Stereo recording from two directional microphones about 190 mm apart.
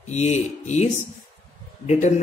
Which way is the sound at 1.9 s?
35° left (ahead or behind).